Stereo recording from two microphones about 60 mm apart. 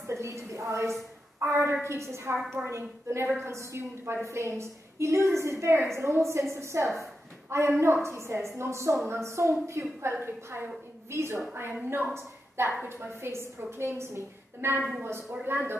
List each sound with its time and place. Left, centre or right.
0.0 s a sound: right
1.4 s a woman's voice: right
10.1 s a woman's voice: right
11.8 s a woman's voice: right
12.1 s a woman's voice: right